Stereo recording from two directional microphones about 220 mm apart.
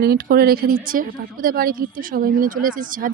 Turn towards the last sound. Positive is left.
turn(degrees=-40)  # may be behind; listen again after turning